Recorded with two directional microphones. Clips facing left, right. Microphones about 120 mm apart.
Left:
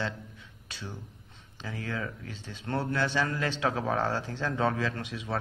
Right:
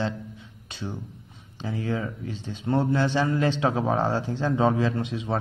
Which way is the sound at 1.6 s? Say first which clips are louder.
Right 7 dB; 25° right (ahead or behind).